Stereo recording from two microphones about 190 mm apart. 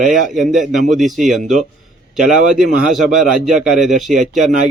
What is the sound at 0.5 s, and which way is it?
Speech, 45° right (ahead or behind).